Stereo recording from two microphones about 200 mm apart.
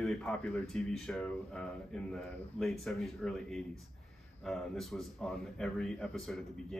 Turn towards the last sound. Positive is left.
turn(degrees=0)  # may be behind; listen again after turning